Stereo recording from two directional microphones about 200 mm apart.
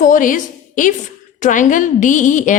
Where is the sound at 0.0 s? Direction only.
40° left (ahead or behind).